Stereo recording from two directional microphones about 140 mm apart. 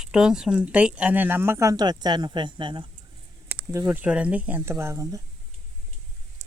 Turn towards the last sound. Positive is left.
turn(degrees=-20)  # may be behind; listen again after turning